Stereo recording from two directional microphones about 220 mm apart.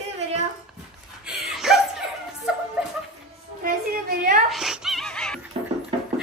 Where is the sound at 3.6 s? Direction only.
40° right (ahead or behind).